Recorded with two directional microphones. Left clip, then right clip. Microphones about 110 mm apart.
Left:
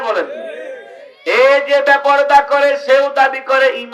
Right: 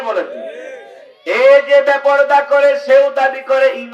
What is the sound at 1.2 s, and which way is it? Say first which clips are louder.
A man's voice: right 2 dB; 40° left (ahead or behind).